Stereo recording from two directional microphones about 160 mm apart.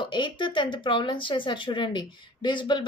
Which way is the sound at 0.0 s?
30° left (ahead or behind).